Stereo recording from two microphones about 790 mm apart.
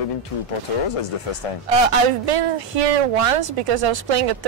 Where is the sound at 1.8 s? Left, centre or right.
Right.